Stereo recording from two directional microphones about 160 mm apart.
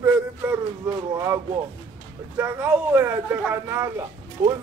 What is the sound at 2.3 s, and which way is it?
Speech, 15° right (ahead or behind).